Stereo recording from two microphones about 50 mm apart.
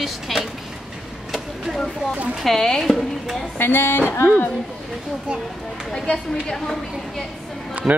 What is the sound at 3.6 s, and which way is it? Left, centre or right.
Speech, left.